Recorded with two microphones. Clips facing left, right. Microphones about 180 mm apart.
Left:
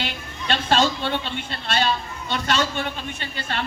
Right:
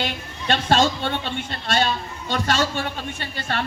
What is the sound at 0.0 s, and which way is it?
Speech, 45° right (ahead or behind).